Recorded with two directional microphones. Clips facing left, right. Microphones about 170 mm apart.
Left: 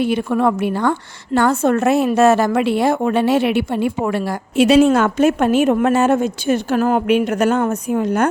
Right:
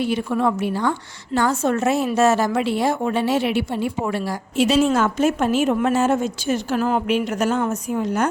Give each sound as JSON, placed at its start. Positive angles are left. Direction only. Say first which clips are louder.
{"t": 0.0, "sound": "a woman's voice", "louder": "left 4 dB", "side_deg": 55}